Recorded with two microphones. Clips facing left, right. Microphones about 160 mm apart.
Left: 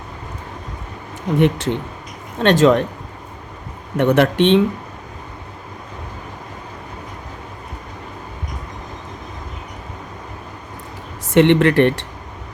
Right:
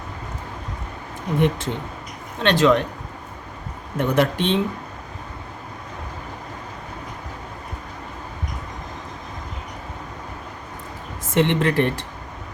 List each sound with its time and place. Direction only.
1.4 s speech: 80° left
2.4 s speech: 45° left (ahead or behind)
3.9 s speech: 70° left (ahead or behind)
11.3 s speech: 75° left (ahead or behind)